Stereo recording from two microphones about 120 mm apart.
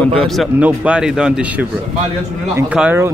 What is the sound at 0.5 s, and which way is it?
Speech, 10° right (ahead or behind).